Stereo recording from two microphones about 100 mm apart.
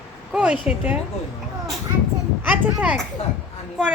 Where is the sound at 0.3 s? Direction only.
10° right (ahead or behind).